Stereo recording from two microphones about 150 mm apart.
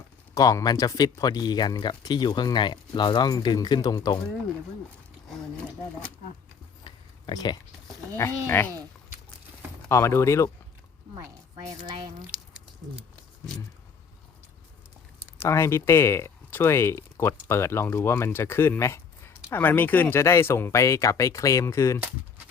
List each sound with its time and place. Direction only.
0.3 s speech: 25° left (ahead or behind)
6.8 s a sound: 30° left (ahead or behind)
8.1 s speech: 15° left (ahead or behind)
9.9 s speech: 15° left (ahead or behind)
11.1 s speech: 25° right (ahead or behind)
12.3 s a sound: 5° right (ahead or behind)
15.3 s speech: 20° left (ahead or behind)